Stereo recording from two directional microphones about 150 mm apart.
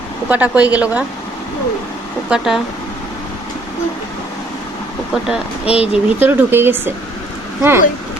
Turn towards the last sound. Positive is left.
turn(degrees=-15)  # may be behind; listen again after turning